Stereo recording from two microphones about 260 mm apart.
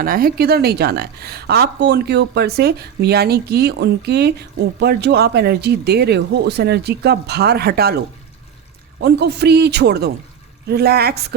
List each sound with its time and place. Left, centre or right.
0.0 s a woman's voice: right
9.0 s a woman's voice: right